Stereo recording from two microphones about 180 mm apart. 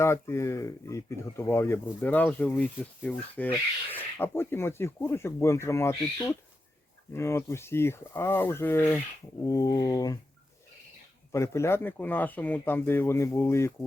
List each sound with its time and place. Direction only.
0.0 s speech: 15° left (ahead or behind)
11.3 s speech: 15° left (ahead or behind)